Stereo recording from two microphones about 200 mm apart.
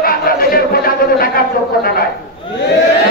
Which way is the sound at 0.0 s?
45° left (ahead or behind).